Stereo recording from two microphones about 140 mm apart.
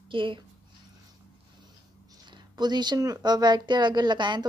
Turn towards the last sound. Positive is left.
turn(degrees=-35)  # may be behind; listen again after turning